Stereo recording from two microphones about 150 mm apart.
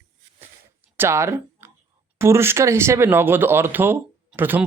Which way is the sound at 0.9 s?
20° right (ahead or behind).